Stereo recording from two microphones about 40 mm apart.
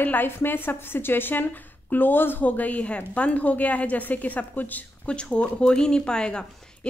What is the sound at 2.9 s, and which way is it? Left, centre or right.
A woman's voice, left.